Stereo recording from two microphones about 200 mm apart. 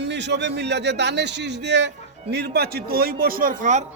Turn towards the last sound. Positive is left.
turn(degrees=-40)  # may be behind; listen again after turning